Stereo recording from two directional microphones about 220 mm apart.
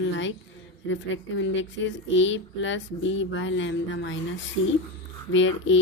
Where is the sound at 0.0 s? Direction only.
55° left (ahead or behind).